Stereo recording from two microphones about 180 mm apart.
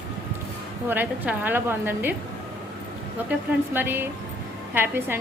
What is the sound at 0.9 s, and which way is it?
Speech, 10° right (ahead or behind).